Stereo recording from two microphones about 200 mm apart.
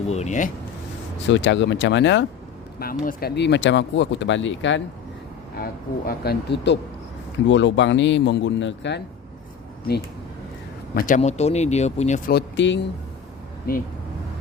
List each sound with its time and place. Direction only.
0.1 s speech: 35° left (ahead or behind)
1.3 s speech: 65° left (ahead or behind)
2.7 s speech: 45° left (ahead or behind); by 4.8 s 65° left (ahead or behind)
5.5 s speech: 50° left (ahead or behind)
7.4 s speech: 65° left (ahead or behind)
10.9 s speech: 40° left (ahead or behind)
12.3 s speech: 60° left (ahead or behind)
13.7 s speech: 45° left (ahead or behind)